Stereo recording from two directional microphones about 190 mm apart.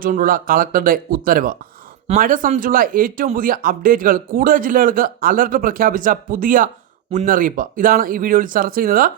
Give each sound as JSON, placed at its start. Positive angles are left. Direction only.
{"t": 0.0, "sound": "speech", "side_deg": -45}